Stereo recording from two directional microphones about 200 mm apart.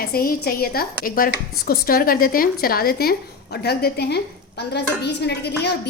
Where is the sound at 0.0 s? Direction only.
50° left (ahead or behind).